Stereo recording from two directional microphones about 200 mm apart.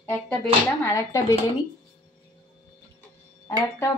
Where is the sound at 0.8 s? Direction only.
15° left (ahead or behind).